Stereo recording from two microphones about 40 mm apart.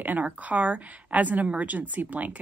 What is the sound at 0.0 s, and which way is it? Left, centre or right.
A woman's voice, right.